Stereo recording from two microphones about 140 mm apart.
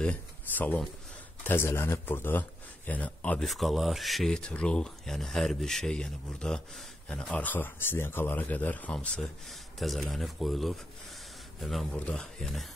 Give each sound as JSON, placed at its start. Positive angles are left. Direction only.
{"t": 0.0, "sound": "speech", "side_deg": 10}